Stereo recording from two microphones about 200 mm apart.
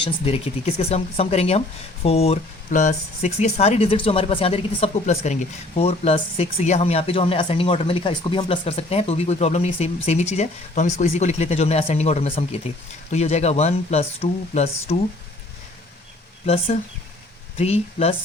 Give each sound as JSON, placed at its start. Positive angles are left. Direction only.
{"t": 0.0, "sound": "speech", "side_deg": 30}
{"t": 16.5, "sound": "speech", "side_deg": 30}